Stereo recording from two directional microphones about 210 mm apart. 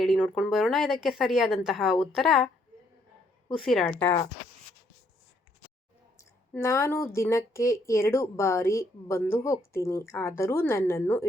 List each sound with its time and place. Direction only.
0.0 s speech: centre (ahead or behind)
3.5 s speech: centre (ahead or behind)
4.0 s speech: 15° left (ahead or behind)
6.1 s speech: 15° left (ahead or behind)